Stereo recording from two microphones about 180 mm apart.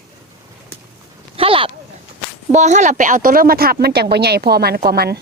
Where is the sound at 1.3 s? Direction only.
30° right (ahead or behind).